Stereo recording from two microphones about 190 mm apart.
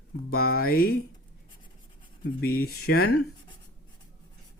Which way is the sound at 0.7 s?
50° left (ahead or behind).